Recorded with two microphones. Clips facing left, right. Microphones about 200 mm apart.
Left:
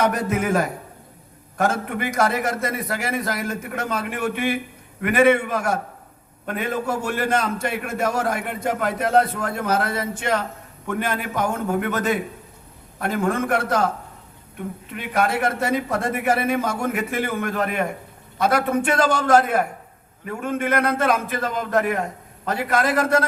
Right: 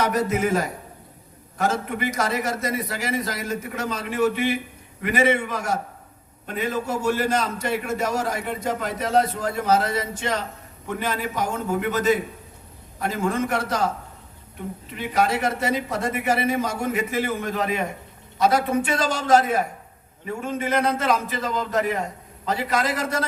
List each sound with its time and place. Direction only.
0.0 s a man's voice: 55° left (ahead or behind)
14.9 s a man's voice: 55° left (ahead or behind)